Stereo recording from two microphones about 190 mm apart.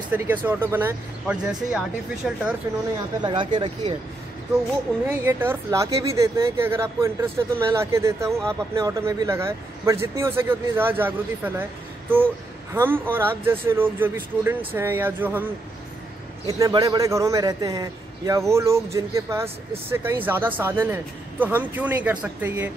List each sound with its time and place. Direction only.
0.1 s speech: 10° right (ahead or behind)
3.2 s a man's voice: 25° right (ahead or behind)
5.0 s speech: 10° right (ahead or behind)
12.7 s a man's voice: 10° right (ahead or behind)